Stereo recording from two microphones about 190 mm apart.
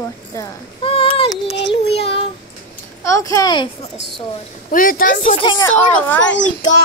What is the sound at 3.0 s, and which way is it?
Speech, 15° left (ahead or behind).